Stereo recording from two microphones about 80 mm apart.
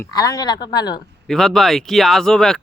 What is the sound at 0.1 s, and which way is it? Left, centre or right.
Speech, left.